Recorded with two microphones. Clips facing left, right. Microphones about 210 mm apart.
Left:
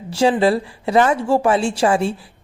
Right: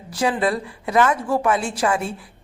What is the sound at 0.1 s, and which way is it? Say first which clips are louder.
A woman's voice: left 6 dB; 30° left (ahead or behind).